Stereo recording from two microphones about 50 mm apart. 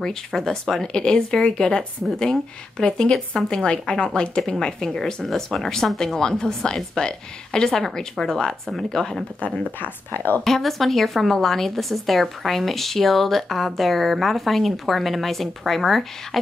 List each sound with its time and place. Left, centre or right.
0.0 s speech: centre
9.8 s speech: left
10.4 s a woman's voice: centre